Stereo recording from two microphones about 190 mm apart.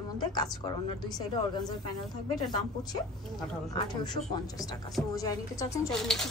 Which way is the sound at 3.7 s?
20° left (ahead or behind).